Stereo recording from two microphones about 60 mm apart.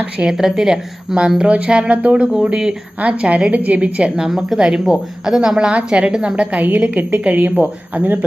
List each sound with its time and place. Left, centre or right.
0.3 s a woman's voice: centre
4.3 s a woman's voice: centre; by 8.2 s right